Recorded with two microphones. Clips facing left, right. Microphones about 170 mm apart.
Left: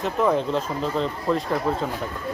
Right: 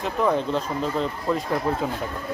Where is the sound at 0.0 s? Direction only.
Centre (ahead or behind).